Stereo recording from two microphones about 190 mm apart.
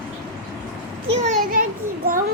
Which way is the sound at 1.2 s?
40° right (ahead or behind).